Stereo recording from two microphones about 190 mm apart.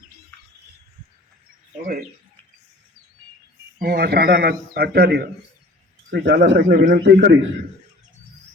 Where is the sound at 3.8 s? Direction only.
55° right (ahead or behind).